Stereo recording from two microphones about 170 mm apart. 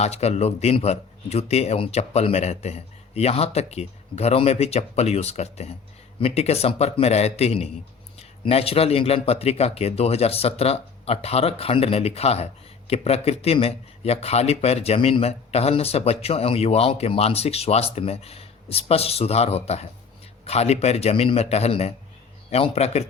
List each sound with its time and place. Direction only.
0.0 s speech: 40° left (ahead or behind)